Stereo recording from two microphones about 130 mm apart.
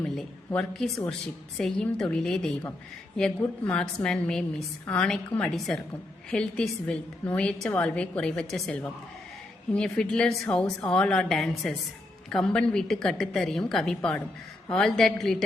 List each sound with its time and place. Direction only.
0.0 s a woman's voice: 5° left (ahead or behind)